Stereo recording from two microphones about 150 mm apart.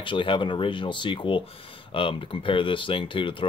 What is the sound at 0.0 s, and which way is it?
Speech, 35° left (ahead or behind).